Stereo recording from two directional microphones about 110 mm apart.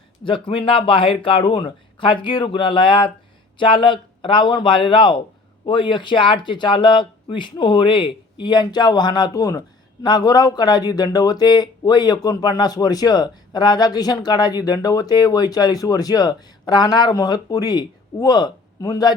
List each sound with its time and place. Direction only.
0.3 s speech: 50° left (ahead or behind); by 19.1 s 35° left (ahead or behind)